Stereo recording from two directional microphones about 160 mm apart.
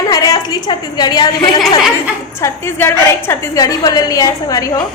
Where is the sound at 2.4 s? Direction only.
15° left (ahead or behind).